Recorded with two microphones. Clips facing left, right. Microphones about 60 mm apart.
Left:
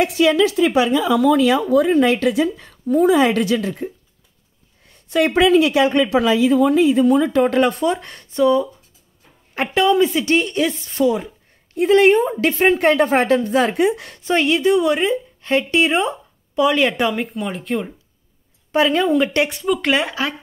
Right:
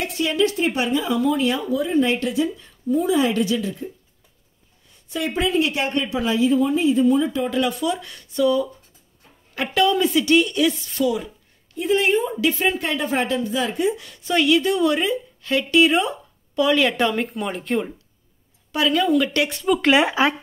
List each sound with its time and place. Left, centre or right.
0.0 s speech: left
4.8 s speech: left
11.7 s a woman's voice: left
14.2 s speech: left
17.0 s speech: centre
18.7 s speech: left
19.6 s speech: centre